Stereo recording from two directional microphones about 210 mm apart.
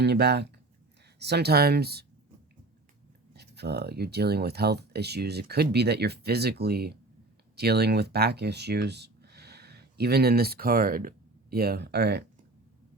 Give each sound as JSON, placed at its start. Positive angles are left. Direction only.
{"t": 0.0, "sound": "speech", "side_deg": -50}
{"t": 3.3, "sound": "speech", "side_deg": -50}